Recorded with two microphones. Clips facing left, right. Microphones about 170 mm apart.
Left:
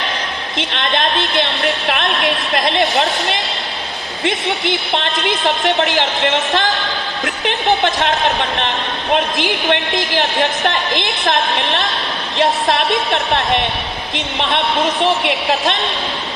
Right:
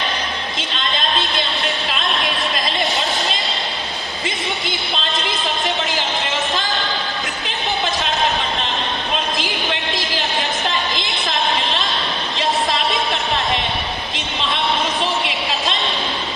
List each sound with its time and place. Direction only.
0.5 s a man's voice: 70° left (ahead or behind)
4.6 s a man's voice: 70° left (ahead or behind)
10.2 s a woman's voice: 65° left (ahead or behind)
12.4 s a sound: 60° left (ahead or behind)
13.1 s a woman's voice: 65° left (ahead or behind)
15.3 s a woman's voice: 60° left (ahead or behind)